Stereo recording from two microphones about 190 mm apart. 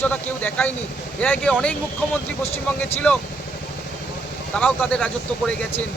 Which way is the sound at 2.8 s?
10° left (ahead or behind).